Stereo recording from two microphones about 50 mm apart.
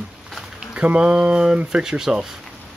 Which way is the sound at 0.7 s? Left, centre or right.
Centre.